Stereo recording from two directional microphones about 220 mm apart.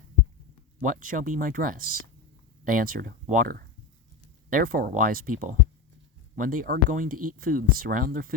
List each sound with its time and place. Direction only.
0.8 s speech: 35° right (ahead or behind)